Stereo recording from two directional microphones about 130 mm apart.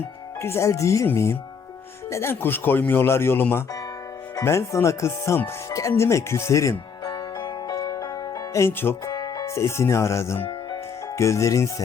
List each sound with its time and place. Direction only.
0.4 s speech: 20° left (ahead or behind)
7.1 s music: 35° left (ahead or behind); by 9.1 s 20° left (ahead or behind)
9.1 s speech: 30° left (ahead or behind)